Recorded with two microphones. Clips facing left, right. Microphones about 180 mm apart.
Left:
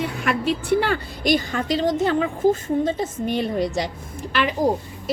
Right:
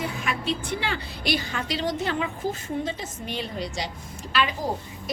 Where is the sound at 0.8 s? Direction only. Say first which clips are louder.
Left 7 dB; 50° left (ahead or behind).